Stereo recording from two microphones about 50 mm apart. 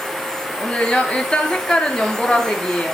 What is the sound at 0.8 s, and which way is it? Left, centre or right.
Speech, centre.